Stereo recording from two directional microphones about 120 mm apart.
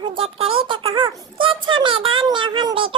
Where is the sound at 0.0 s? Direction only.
50° right (ahead or behind).